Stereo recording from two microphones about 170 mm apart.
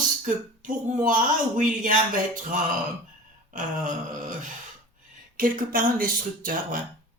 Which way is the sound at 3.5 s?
50° right (ahead or behind).